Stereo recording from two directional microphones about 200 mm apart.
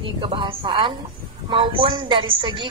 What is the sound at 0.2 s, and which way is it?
Speech, 25° right (ahead or behind).